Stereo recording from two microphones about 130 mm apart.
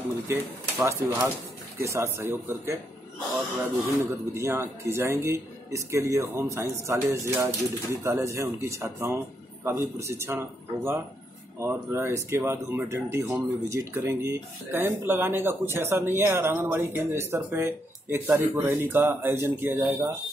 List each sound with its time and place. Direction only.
0.3 s speech: 20° right (ahead or behind)
4.0 s speech: 20° right (ahead or behind)